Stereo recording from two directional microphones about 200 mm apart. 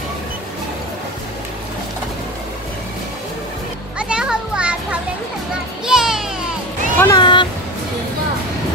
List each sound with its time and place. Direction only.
4.0 s children playing: 5° right (ahead or behind)
5.9 s music: 5° right (ahead or behind)
7.0 s a sound: 20° left (ahead or behind)